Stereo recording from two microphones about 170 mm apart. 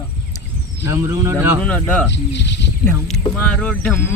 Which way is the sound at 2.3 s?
90° left.